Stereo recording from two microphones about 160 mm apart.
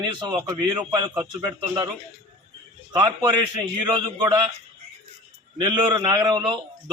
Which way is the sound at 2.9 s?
25° right (ahead or behind).